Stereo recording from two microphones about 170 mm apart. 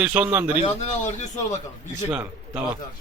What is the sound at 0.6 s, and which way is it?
Speech, 45° left (ahead or behind).